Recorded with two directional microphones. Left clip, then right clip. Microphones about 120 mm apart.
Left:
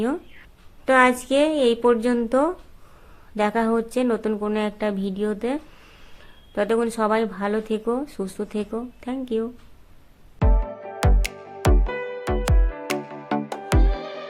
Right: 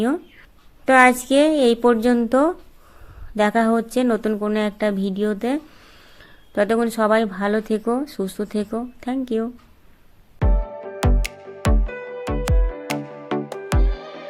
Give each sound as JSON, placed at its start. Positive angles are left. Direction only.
{"t": 0.9, "sound": "a woman's voice", "side_deg": -30}
{"t": 11.0, "sound": "music", "side_deg": 0}